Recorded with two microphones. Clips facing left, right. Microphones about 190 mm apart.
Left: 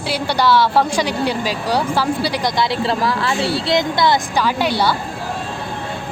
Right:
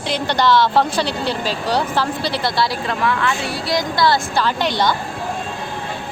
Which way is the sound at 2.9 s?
35° left (ahead or behind).